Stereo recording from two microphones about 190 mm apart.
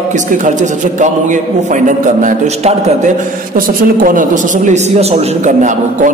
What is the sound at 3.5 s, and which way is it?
A man's voice, 50° right (ahead or behind).